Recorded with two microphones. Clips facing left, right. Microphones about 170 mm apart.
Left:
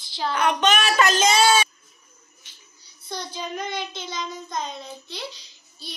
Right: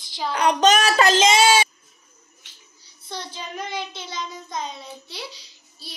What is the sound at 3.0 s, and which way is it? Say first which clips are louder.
A child's voice: left 2 dB; centre (ahead or behind).